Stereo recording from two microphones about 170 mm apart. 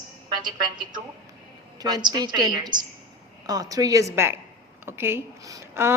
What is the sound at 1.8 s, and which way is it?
A woman's voice, 25° right (ahead or behind).